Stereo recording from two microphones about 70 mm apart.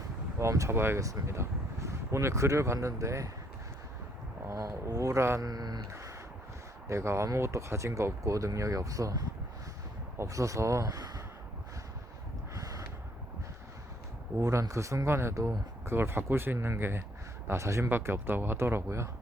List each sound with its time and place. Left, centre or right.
0.3 s speech: right
0.8 s speech: right
1.0 s speech: right
4.4 s speech: right
5.4 s speech: right
5.9 s a sound: right
6.8 s speech: right
8.2 s speech: right
12.5 s a sound: right
14.4 s speech: right
17.8 s speech: right